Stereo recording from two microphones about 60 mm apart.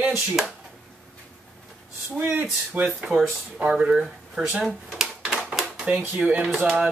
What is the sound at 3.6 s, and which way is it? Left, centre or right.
Speech, centre.